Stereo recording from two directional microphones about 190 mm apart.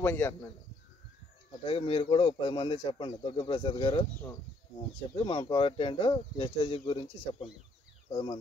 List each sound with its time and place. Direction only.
0.0 s speech: 10° left (ahead or behind)
1.5 s speech: 30° left (ahead or behind)
5.1 s speech: 25° left (ahead or behind)